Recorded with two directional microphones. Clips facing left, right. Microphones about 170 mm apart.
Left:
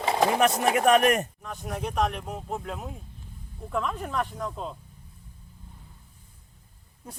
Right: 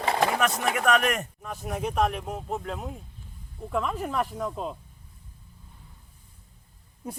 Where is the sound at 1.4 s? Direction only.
5° right (ahead or behind).